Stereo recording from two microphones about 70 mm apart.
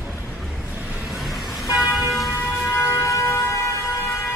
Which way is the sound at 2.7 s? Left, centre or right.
Left.